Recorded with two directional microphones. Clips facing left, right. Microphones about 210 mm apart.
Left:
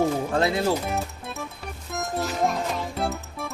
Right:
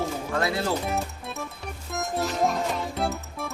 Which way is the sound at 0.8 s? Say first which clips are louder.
Even; centre (ahead or behind).